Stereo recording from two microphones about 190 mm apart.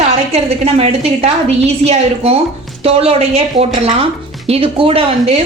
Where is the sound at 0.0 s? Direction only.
35° right (ahead or behind).